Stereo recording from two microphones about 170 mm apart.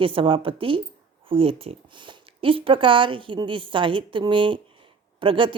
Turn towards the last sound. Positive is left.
turn(degrees=-30)  # may be behind; listen again after turning